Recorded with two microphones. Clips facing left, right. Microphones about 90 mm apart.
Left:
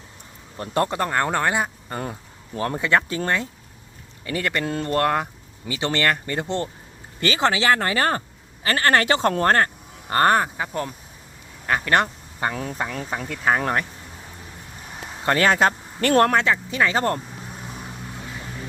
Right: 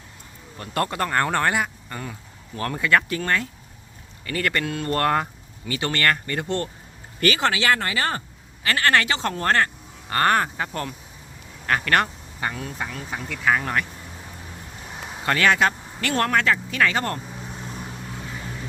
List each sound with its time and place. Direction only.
0.5 s speech: 25° left (ahead or behind); by 1.5 s 10° left (ahead or behind)
1.5 s speech: 25° left (ahead or behind)
4.6 s speech: 35° left (ahead or behind)
4.9 s speech: 10° left (ahead or behind); by 10.4 s 30° left (ahead or behind)
10.4 s speech: 10° left (ahead or behind)
11.9 s a sound: 25° left (ahead or behind)
12.5 s speech: 45° left (ahead or behind)
13.2 s speech: 35° left (ahead or behind)
15.3 s speech: 35° left (ahead or behind)
16.4 s speech: 20° left (ahead or behind)
17.4 s vehicle: centre (ahead or behind)